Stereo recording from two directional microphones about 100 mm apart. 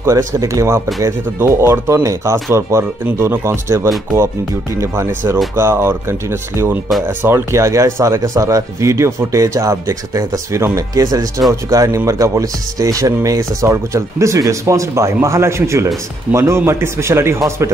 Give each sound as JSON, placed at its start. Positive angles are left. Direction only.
{"t": 0.0, "sound": "speech", "side_deg": -30}